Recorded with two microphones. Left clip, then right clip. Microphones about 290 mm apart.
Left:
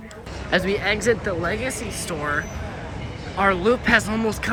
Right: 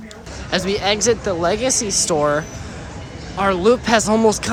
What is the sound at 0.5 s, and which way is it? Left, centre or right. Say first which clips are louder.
Speech: right 2 dB; centre.